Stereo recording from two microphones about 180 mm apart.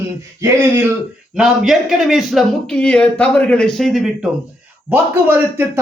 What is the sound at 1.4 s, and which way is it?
A man's voice, centre (ahead or behind).